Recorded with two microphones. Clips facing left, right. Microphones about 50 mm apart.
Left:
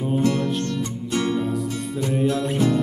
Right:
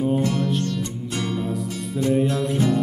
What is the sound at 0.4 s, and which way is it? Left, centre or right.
Music, centre.